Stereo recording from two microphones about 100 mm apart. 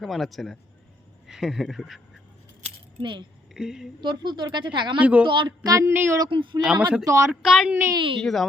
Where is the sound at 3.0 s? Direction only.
50° right (ahead or behind).